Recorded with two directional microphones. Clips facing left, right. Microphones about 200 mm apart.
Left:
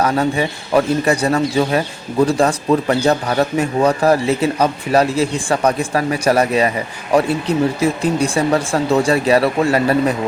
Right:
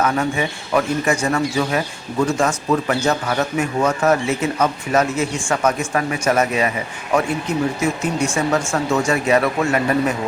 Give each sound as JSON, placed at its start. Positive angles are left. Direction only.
{"t": 0.0, "sound": "speech", "side_deg": 35}